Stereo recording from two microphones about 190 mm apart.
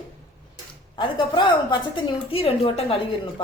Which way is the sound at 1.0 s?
25° left (ahead or behind).